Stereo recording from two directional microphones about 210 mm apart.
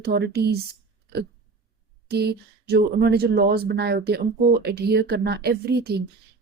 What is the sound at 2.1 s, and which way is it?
A woman's voice, 50° right (ahead or behind).